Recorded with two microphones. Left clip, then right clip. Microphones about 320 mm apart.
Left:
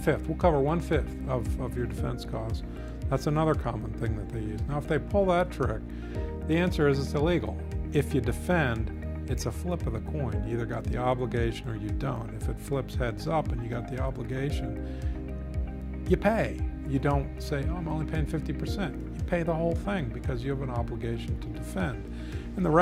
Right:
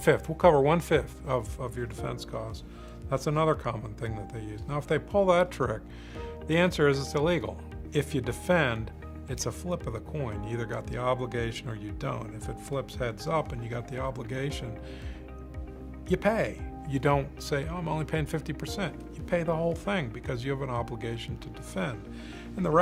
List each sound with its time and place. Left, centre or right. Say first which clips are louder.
0.0 s speech: right 4 dB; left
7.9 s speech: left 2 dB; left
10.2 s speech: left 1 dB; left
12.7 s speech: left 1 dB; left
16.0 s speech: left 1 dB; left
17.5 s speech: right 2 dB; left
19.3 s speech: even; left
21.8 s speech: even; left